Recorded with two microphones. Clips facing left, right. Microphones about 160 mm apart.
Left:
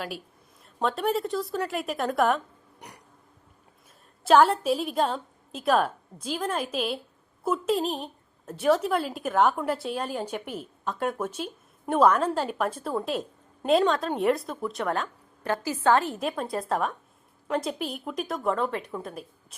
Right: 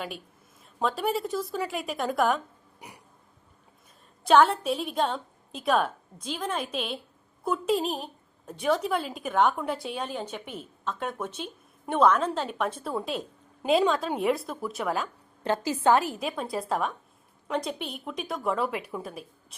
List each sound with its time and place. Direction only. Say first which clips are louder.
0.6 s a woman's voice: left 1 dB; centre (ahead or behind)
4.2 s a woman's voice: left 1 dB; 5° left (ahead or behind)
15.4 s a woman's voice: even; 20° right (ahead or behind)
16.1 s a woman's voice: left 2 dB; centre (ahead or behind)